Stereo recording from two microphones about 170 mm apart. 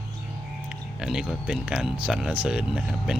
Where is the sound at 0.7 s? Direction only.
5° right (ahead or behind).